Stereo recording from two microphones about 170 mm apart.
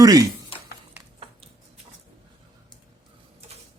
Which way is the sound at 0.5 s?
30° left (ahead or behind).